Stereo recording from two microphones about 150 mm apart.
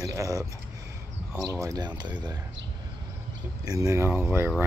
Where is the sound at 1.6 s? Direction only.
25° right (ahead or behind).